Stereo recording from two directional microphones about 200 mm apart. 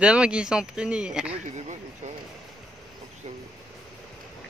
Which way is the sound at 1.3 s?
35° right (ahead or behind).